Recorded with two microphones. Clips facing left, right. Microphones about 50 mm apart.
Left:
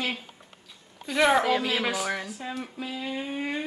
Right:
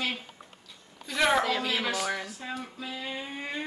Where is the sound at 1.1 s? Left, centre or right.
Centre.